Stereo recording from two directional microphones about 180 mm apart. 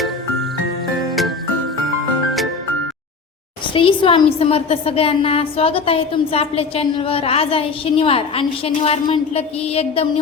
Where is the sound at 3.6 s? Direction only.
30° left (ahead or behind).